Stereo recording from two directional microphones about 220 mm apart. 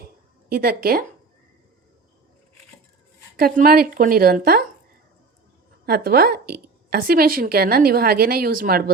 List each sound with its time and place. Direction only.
0.5 s a woman's voice: 40° right (ahead or behind)
3.3 s a woman's voice: 40° right (ahead or behind)
5.8 s a woman's voice: 45° right (ahead or behind)